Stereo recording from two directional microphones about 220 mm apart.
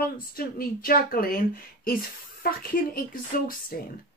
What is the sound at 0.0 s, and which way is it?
Speech, 40° left (ahead or behind).